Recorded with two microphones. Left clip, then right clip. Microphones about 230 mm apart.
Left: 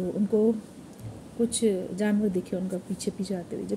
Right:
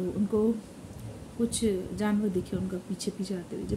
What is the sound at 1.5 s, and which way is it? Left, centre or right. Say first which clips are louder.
A woman's voice: left 3 dB; centre.